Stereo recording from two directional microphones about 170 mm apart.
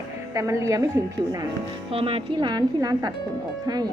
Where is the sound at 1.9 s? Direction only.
35° right (ahead or behind).